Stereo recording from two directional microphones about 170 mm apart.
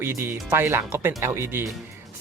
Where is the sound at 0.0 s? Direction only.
15° right (ahead or behind).